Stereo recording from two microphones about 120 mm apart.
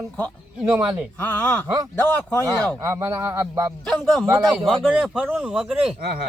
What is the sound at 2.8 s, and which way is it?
Speech, 25° right (ahead or behind).